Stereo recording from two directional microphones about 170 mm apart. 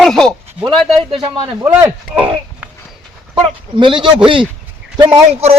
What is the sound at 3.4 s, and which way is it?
A man's voice, 30° right (ahead or behind).